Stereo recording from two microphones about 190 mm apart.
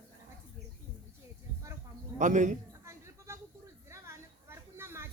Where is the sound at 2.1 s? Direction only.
40° right (ahead or behind).